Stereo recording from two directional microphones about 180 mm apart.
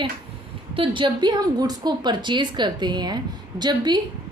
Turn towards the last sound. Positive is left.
turn(degrees=-25)  # may be behind; listen again after turning